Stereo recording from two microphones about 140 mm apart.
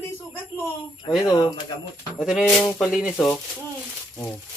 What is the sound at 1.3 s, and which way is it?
Music, 30° left (ahead or behind).